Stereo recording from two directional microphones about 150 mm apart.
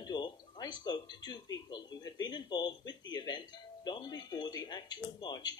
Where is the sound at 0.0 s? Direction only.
30° left (ahead or behind).